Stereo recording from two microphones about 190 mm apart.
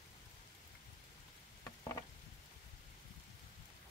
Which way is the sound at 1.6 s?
15° left (ahead or behind).